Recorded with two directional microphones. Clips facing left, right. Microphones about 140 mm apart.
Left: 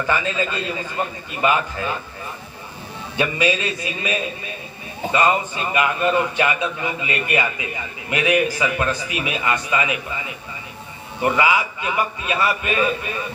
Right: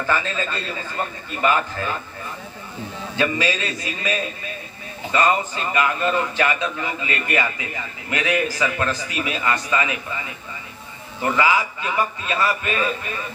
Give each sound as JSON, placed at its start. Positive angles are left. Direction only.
{"t": 0.1, "sound": "a man's voice", "side_deg": 15}
{"t": 3.2, "sound": "a man's voice", "side_deg": 20}